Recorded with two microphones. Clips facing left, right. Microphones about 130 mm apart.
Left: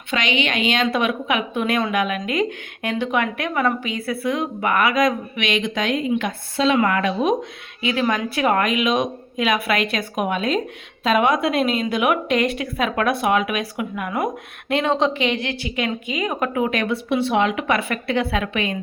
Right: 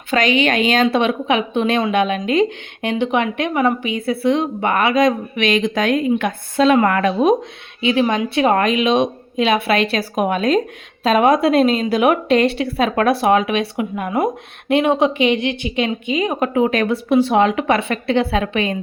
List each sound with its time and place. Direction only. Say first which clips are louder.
0.1 s a woman's voice: right 6 dB; 40° right (ahead or behind)
7.8 s a woman's voice: right 4 dB; 25° right (ahead or behind)
14.7 s a woman's voice: right 4 dB; 15° right (ahead or behind); by 18.8 s 35° right (ahead or behind)